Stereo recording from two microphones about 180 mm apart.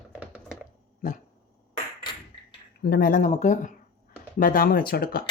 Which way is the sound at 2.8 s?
60° left (ahead or behind).